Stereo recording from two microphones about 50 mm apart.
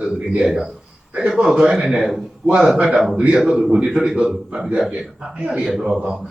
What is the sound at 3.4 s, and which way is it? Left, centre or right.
A man's voice, centre.